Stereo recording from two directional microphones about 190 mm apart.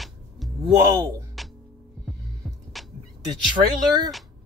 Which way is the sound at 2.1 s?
Centre (ahead or behind).